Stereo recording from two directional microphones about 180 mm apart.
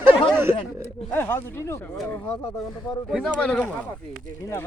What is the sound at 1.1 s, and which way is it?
Speech, 10° left (ahead or behind).